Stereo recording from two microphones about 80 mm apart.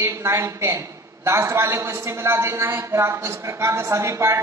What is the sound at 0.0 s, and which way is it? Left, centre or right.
A man's voice, right.